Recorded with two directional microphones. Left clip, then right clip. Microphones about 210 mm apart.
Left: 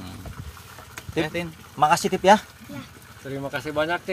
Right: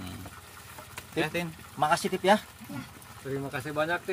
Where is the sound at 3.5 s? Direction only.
30° left (ahead or behind).